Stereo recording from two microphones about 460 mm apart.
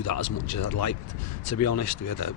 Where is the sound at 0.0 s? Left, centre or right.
Left.